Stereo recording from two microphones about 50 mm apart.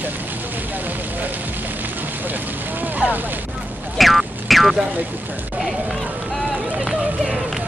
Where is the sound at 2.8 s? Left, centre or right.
Right.